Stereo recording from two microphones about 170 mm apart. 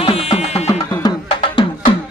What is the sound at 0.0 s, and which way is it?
Music, 35° left (ahead or behind).